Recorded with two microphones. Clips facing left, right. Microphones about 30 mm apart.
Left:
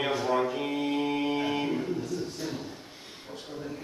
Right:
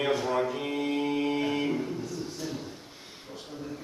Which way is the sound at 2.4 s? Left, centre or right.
Centre.